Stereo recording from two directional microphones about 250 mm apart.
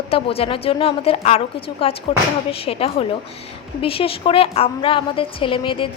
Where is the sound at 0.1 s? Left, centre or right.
Left.